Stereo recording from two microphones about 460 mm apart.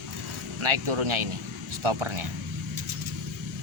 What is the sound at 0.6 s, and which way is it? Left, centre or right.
Speech, right.